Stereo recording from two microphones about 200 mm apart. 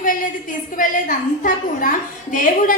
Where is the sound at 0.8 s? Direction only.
40° left (ahead or behind).